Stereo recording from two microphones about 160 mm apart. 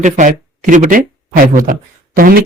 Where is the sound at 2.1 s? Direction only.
65° right (ahead or behind).